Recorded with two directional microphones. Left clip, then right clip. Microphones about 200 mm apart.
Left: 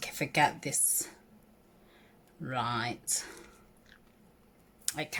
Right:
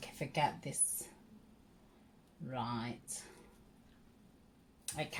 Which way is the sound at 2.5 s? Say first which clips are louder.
Left 8 dB; 40° left (ahead or behind).